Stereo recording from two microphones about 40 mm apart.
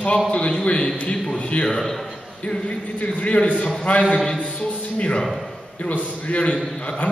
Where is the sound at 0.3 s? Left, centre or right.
Left.